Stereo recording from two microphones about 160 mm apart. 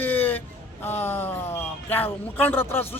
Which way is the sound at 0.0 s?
10° left (ahead or behind).